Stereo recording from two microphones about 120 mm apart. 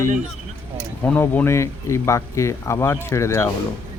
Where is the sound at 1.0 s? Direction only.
15° left (ahead or behind).